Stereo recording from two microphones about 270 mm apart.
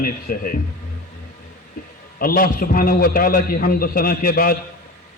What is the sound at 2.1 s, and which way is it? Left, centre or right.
A man's voice, left.